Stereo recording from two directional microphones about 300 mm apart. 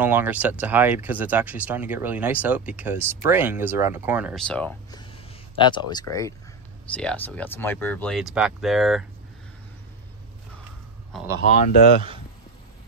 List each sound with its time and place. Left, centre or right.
0.0 s speech: centre
5.6 s speech: centre
11.4 s speech: left